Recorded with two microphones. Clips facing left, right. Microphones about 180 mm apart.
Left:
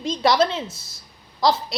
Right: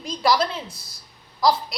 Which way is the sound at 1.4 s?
25° left (ahead or behind).